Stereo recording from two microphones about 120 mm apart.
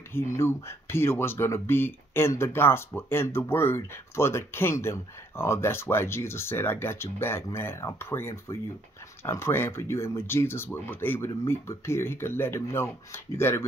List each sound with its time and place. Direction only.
0.1 s speech: 20° left (ahead or behind)